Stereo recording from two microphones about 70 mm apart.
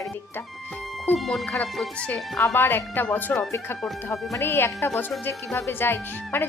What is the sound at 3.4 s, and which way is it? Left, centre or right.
Speech, left.